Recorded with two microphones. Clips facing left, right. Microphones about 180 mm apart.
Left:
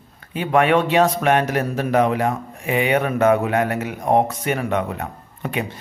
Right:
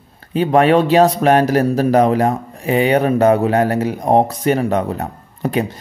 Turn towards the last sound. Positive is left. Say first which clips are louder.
# right 7 dB
turn(degrees=-35)  # may be behind; listen again after turning